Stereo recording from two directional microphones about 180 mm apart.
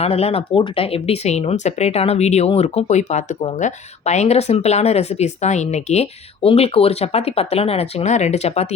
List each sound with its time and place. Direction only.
0.0 s speech: 35° left (ahead or behind)